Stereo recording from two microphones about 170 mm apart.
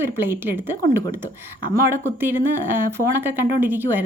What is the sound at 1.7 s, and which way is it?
Speech, 20° left (ahead or behind).